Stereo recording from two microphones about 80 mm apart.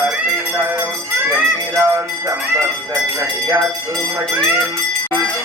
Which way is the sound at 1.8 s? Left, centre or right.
Right.